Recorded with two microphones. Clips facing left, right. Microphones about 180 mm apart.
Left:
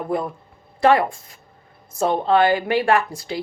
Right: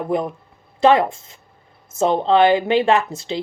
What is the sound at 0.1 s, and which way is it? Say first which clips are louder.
Speech: right 2 dB; 20° right (ahead or behind).